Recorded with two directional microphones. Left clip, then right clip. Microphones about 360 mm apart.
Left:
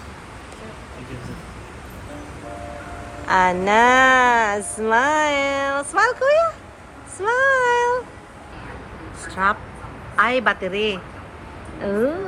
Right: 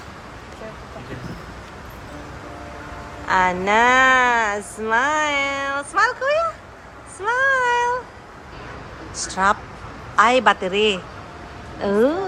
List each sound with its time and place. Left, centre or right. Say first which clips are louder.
3.2 s speech: left 1 dB; centre
7.2 s a sound: left 1 dB; centre
9.3 s a man's voice: right 2 dB; centre